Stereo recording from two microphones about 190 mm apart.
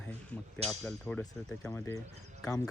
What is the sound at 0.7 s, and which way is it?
Speech, 5° left (ahead or behind).